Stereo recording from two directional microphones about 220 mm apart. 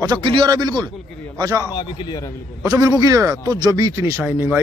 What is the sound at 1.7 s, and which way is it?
Speech, 20° left (ahead or behind).